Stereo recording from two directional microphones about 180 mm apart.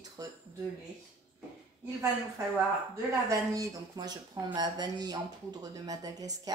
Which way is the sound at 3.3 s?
20° right (ahead or behind).